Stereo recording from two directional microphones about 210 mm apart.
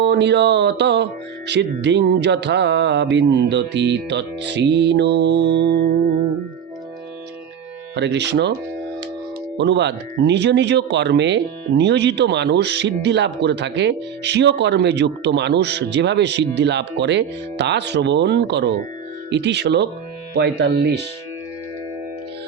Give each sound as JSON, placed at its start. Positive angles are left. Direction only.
{"t": 0.0, "sound": "speech", "side_deg": -55}
{"t": 7.9, "sound": "speech", "side_deg": -55}
{"t": 9.6, "sound": "speech", "side_deg": -55}